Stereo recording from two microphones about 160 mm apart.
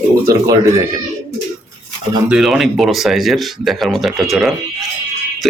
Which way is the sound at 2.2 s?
5° right (ahead or behind).